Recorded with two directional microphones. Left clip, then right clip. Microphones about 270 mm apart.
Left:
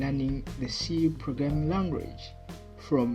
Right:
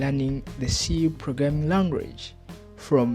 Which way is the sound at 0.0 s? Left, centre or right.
Right.